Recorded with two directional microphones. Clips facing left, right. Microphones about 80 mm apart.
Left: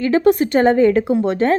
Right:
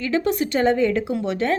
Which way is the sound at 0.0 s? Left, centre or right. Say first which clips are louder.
Left 7 dB; left.